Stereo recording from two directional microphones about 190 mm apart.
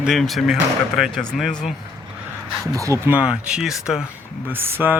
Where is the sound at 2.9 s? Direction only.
10° right (ahead or behind).